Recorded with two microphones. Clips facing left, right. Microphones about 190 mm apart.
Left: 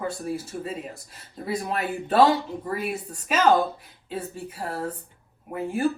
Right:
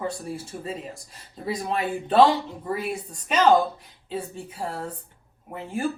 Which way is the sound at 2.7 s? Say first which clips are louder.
Even; 5° left (ahead or behind).